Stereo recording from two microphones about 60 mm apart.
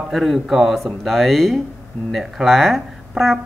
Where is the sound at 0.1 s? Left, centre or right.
Centre.